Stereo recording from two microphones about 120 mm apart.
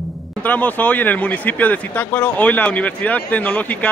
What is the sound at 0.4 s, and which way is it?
Speech, 15° left (ahead or behind).